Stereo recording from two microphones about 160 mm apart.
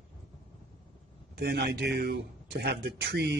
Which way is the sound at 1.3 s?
90° right.